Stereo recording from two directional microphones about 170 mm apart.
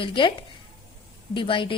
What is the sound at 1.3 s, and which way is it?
Speech, 30° left (ahead or behind).